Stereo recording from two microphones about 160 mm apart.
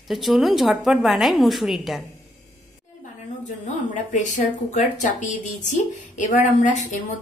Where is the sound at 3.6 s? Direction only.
50° left (ahead or behind).